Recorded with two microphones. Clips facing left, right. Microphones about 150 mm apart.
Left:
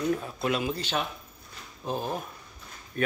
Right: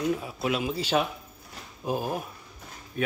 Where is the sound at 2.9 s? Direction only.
5° right (ahead or behind).